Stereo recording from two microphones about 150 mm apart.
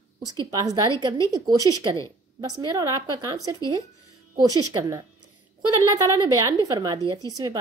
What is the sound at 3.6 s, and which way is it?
Speech, 25° left (ahead or behind).